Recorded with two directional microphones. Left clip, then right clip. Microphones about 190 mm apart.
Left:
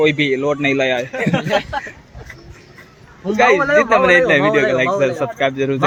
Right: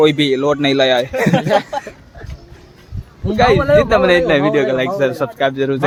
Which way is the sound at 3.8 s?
20° right (ahead or behind).